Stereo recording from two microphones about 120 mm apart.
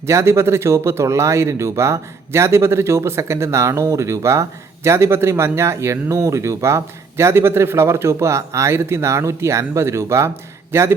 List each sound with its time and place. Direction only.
0.0 s speech: 25° right (ahead or behind)